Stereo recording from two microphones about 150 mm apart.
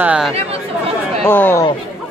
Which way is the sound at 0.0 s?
5° right (ahead or behind).